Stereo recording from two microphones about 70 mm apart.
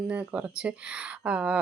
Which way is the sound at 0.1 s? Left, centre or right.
Right.